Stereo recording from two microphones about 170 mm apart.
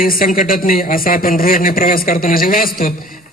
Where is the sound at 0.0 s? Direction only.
55° left (ahead or behind).